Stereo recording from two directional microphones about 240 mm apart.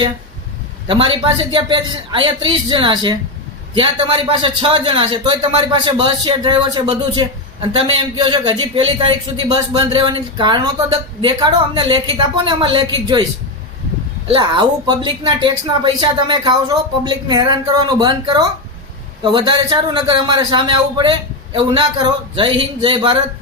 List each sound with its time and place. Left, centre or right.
0.9 s speech: right
14.3 s speech: centre